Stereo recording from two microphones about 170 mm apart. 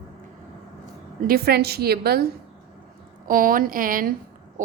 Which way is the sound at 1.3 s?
65° right (ahead or behind).